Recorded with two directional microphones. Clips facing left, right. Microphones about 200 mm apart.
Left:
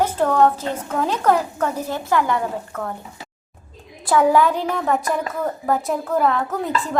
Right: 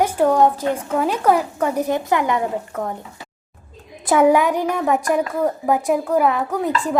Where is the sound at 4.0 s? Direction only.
20° right (ahead or behind).